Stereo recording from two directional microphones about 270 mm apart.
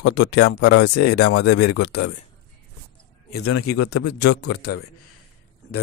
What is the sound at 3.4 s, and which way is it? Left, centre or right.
Speech, left.